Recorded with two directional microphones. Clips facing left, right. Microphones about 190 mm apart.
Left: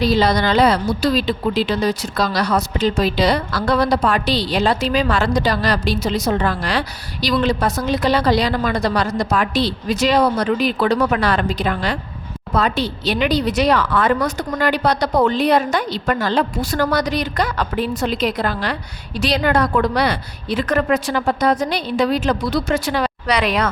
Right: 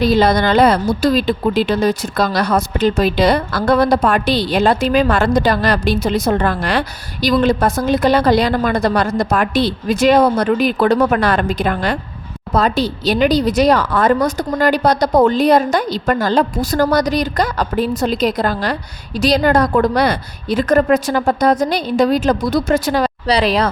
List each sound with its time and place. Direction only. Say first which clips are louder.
0.0 s a woman's voice: right 3 dB; 50° right (ahead or behind)
12.5 s speech: right 3 dB; 40° right (ahead or behind)